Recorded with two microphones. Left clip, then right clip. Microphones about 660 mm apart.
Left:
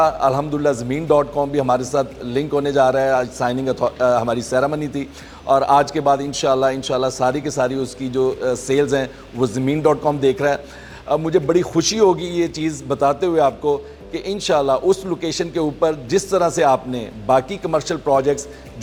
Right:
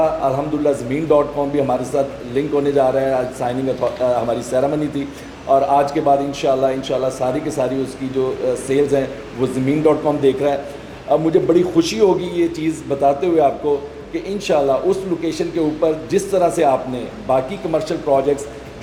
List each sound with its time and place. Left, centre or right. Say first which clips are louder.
0.0 s a man's voice: left 1 dB; left